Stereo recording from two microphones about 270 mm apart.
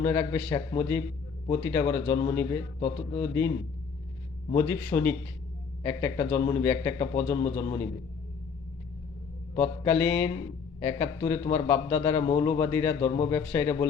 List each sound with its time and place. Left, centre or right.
0.0 s a man's voice: centre
4.5 s a man's voice: centre
9.6 s a man's voice: centre